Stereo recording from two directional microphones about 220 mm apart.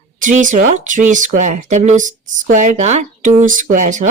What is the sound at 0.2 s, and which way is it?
Speech, 35° right (ahead or behind).